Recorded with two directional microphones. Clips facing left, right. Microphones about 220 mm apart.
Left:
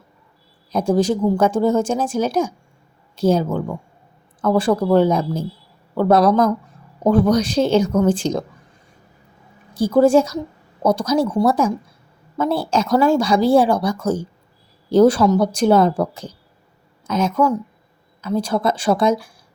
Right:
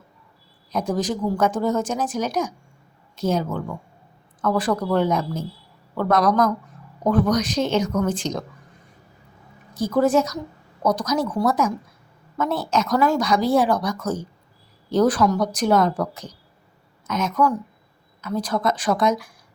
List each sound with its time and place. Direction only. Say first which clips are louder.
0.7 s speech: left 6 dB; 30° left (ahead or behind)
9.7 s speech: left 5 dB; 30° left (ahead or behind)